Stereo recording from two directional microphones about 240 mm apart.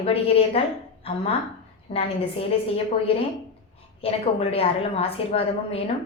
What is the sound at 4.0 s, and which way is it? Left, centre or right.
A woman's voice, left.